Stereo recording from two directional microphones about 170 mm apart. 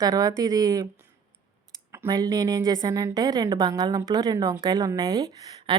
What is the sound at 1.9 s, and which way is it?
Speech, 20° right (ahead or behind).